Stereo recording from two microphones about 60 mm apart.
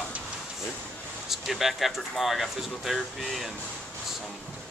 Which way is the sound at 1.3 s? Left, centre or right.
Centre.